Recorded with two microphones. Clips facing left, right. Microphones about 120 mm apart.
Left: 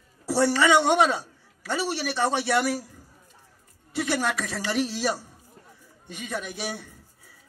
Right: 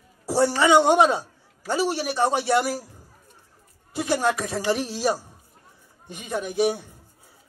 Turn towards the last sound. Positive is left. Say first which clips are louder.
# right 9 dB
turn(degrees=-25)  # may be behind; listen again after turning